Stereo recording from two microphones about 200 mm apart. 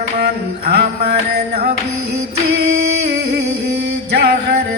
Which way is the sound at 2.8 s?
55° right (ahead or behind).